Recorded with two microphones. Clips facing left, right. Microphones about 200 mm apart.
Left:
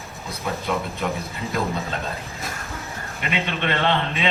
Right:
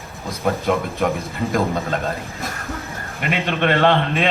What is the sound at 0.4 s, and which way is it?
A man's voice, 55° right (ahead or behind).